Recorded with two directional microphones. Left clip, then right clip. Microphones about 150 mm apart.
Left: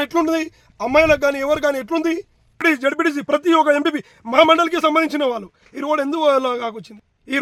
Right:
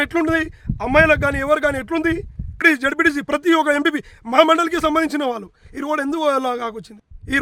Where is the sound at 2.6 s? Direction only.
30° right (ahead or behind).